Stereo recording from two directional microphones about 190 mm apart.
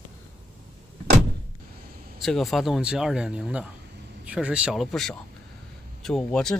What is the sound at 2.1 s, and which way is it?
Speech, centre (ahead or behind).